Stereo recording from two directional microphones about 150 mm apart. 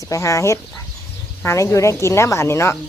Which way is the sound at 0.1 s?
20° left (ahead or behind).